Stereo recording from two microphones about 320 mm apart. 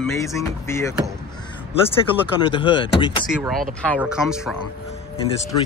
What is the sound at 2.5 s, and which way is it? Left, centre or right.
Speech, centre.